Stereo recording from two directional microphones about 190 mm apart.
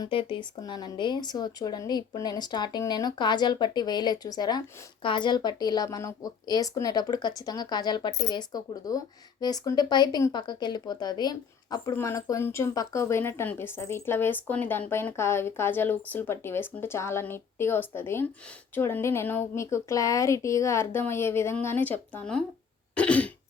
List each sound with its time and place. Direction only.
0.0 s speech: 25° left (ahead or behind); by 22.4 s 5° left (ahead or behind)
23.0 s cough: 5° left (ahead or behind)